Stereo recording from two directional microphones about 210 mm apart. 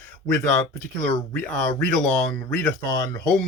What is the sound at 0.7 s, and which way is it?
Speech, 5° left (ahead or behind).